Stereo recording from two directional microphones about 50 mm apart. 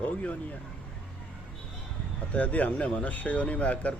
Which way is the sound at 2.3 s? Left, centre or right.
Left.